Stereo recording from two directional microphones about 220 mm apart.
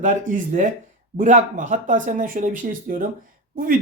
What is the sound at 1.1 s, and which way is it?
Speech, 35° right (ahead or behind).